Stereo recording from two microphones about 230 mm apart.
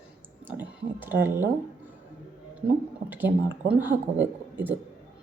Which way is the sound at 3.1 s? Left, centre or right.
Centre.